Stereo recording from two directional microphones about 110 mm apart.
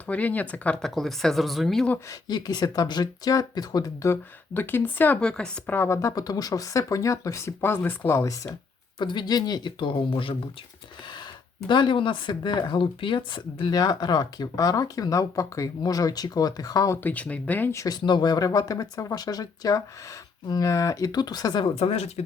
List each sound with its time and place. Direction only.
0.1 s speech: 15° left (ahead or behind)
2.0 s speech: 40° left (ahead or behind); by 5.2 s 15° left (ahead or behind)
5.2 s speech: 5° left (ahead or behind)
5.7 s speech: 25° left (ahead or behind)
9.0 s speech: 45° left (ahead or behind)
11.7 s speech: 45° left (ahead or behind)
17.0 s speech: 15° left (ahead or behind)
17.7 s speech: 35° left (ahead or behind)
21.8 s speech: 70° left (ahead or behind)